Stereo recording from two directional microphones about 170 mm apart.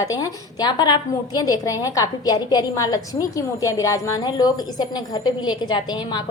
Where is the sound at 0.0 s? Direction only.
20° left (ahead or behind).